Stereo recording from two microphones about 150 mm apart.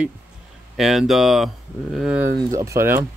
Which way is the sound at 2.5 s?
20° right (ahead or behind).